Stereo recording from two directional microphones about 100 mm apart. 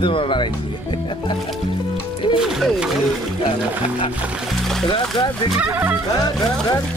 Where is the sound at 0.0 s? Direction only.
55° left (ahead or behind).